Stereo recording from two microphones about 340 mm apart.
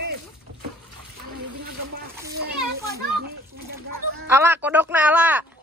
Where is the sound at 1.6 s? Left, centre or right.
Right.